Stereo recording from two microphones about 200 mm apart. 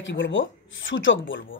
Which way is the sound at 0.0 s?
70° left (ahead or behind).